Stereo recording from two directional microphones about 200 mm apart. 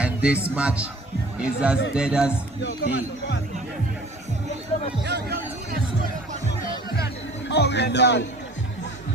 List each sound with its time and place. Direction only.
0.0 s speech: 5° right (ahead or behind)
2.6 s speech: 60° left (ahead or behind)
5.0 s speech: 55° right (ahead or behind)
7.4 s a man's voice: 60° left (ahead or behind)